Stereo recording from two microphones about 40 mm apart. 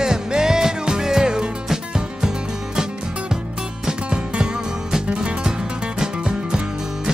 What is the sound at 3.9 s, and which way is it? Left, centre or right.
Music, right.